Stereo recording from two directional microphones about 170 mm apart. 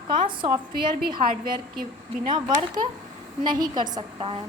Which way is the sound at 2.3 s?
25° right (ahead or behind).